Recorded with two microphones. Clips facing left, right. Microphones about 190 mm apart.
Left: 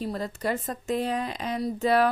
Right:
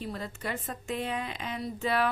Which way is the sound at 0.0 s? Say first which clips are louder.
Left 7 dB; 40° left (ahead or behind).